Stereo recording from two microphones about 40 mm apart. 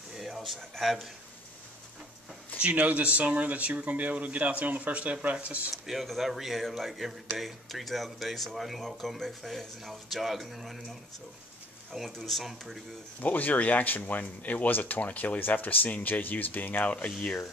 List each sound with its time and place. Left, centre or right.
0.1 s a sound: centre
2.6 s speech: right
5.7 s speech: centre
12.2 s speech: centre
13.2 s speech: left